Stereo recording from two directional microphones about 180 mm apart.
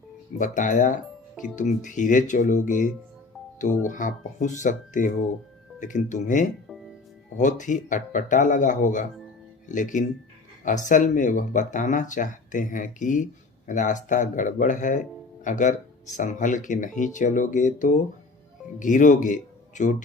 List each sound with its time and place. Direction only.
0.3 s speech: 45° left (ahead or behind)